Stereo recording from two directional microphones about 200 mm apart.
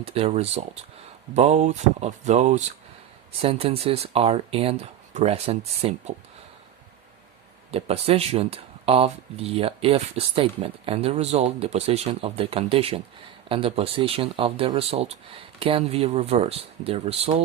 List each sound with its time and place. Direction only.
0.0 s speech: 30° right (ahead or behind)
7.7 s speech: 30° right (ahead or behind)